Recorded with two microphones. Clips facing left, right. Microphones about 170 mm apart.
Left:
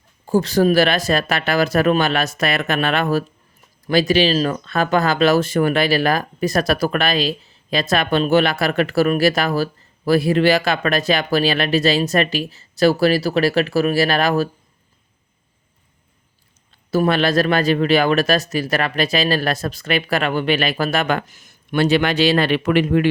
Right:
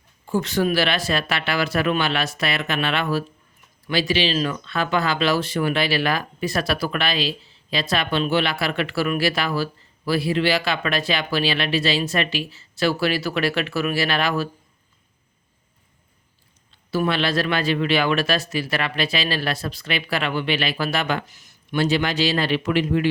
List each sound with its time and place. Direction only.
0.3 s speech: 35° left (ahead or behind)
16.9 s speech: 45° left (ahead or behind); by 23.0 s 60° left (ahead or behind)